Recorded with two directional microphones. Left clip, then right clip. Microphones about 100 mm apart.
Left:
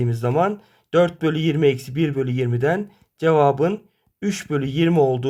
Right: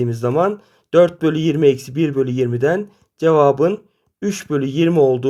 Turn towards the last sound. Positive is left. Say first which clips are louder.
# right 4 dB
turn(degrees=-30)  # may be behind; listen again after turning